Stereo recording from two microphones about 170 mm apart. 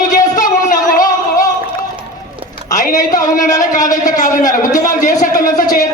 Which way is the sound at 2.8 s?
50° left (ahead or behind).